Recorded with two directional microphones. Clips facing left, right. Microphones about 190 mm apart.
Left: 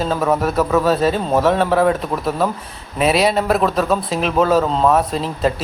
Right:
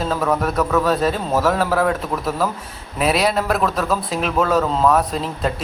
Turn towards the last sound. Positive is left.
turn(degrees=0)  # may be behind; listen again after turning